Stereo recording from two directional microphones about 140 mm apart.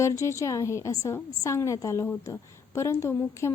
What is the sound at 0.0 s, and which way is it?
A woman's voice, 20° left (ahead or behind).